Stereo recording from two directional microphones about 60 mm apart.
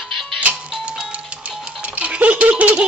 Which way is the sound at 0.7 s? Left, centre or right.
Centre.